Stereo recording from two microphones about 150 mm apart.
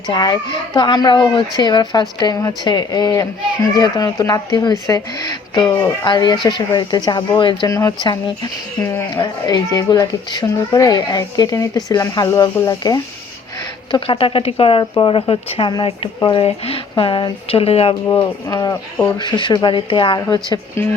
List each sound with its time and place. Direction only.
0.1 s speech: 30° left (ahead or behind)
18.4 s speech: 20° left (ahead or behind)